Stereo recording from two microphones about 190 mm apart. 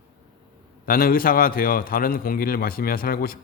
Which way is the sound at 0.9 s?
50° left (ahead or behind).